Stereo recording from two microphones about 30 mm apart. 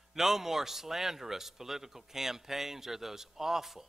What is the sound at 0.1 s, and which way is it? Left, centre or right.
Speech, centre.